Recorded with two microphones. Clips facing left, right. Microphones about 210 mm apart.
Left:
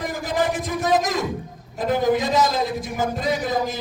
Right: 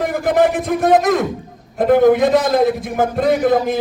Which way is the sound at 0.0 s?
60° right (ahead or behind).